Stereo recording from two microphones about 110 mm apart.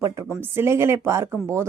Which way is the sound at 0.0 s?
25° right (ahead or behind).